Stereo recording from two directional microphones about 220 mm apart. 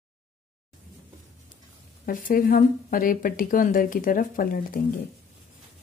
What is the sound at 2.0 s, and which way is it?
Speech, 40° left (ahead or behind).